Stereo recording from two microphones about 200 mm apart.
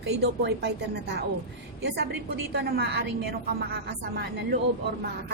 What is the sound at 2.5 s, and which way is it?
A woman's voice, 55° right (ahead or behind).